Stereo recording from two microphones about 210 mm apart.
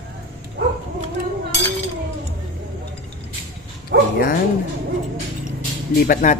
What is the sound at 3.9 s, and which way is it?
Speech, 55° right (ahead or behind).